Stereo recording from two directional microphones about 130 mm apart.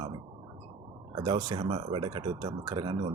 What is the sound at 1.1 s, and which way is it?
Speech, 35° right (ahead or behind).